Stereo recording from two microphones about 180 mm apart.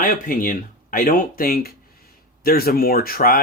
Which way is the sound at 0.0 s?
50° left (ahead or behind).